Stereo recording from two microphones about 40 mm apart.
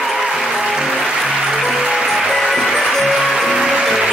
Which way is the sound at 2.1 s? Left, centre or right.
Centre.